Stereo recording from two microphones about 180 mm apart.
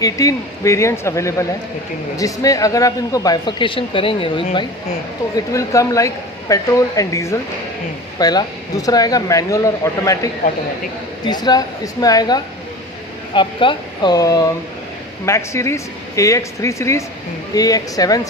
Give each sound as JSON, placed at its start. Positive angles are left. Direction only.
{"t": 0.0, "sound": "speech", "side_deg": 20}
{"t": 5.5, "sound": "speech", "side_deg": 15}
{"t": 11.3, "sound": "speech", "side_deg": 25}